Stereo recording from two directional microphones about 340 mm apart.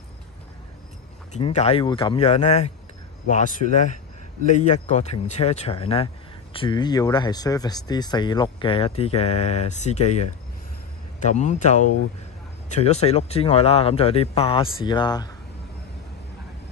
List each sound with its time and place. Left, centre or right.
1.3 s speech: centre